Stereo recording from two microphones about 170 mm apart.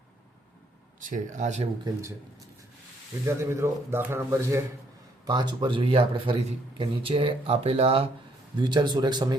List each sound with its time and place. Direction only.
0.9 s speech: 50° right (ahead or behind)
1.8 s speech: 15° right (ahead or behind)
3.2 s speech: 15° right (ahead or behind)